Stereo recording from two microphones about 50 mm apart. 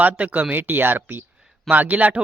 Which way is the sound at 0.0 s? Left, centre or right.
Right.